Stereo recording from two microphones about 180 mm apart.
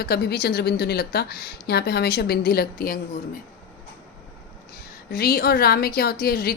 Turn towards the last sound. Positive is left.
turn(degrees=60)  # may be behind; listen again after turning